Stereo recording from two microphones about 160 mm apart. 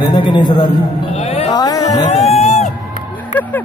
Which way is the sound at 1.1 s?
40° left (ahead or behind).